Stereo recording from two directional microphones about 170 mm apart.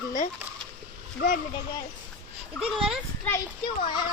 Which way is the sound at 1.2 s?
80° left.